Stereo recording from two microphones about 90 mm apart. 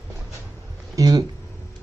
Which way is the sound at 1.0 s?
45° right (ahead or behind).